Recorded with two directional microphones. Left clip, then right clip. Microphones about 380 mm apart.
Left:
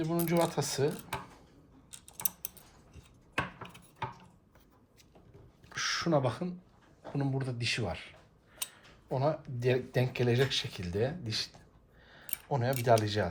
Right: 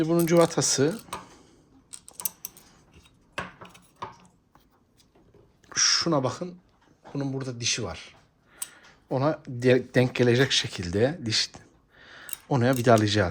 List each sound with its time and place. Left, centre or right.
0.0 s speech: centre
5.7 s a sound: centre
7.1 s speech: centre
9.0 s speech: centre